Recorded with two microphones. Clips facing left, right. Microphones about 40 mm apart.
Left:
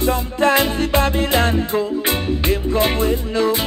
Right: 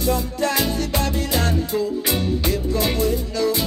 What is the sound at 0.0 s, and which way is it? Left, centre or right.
Music, left.